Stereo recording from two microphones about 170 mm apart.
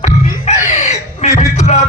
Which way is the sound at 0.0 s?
40° left (ahead or behind).